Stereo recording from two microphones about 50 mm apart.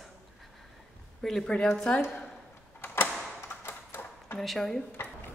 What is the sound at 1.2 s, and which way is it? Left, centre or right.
Speech, centre.